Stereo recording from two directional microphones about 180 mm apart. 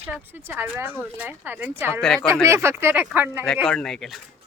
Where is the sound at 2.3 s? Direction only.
15° right (ahead or behind).